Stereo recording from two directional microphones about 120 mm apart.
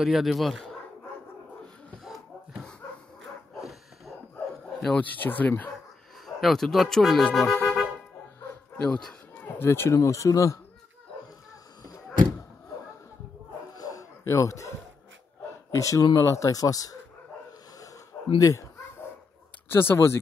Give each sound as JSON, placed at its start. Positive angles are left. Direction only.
{"t": 0.0, "sound": "speech", "side_deg": 0}
{"t": 4.7, "sound": "speech", "side_deg": 0}
{"t": 5.1, "sound": "speech", "side_deg": 15}
{"t": 6.2, "sound": "speech", "side_deg": 0}
{"t": 8.8, "sound": "speech", "side_deg": 10}
{"t": 9.6, "sound": "speech", "side_deg": 20}
{"t": 13.7, "sound": "dog", "side_deg": 30}
{"t": 15.7, "sound": "speech", "side_deg": 25}
{"t": 18.4, "sound": "dog", "side_deg": 25}
{"t": 19.7, "sound": "speech", "side_deg": 20}